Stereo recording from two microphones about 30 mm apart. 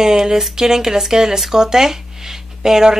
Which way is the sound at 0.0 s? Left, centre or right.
Centre.